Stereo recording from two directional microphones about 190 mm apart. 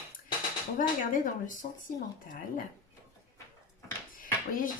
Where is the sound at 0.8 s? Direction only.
45° left (ahead or behind).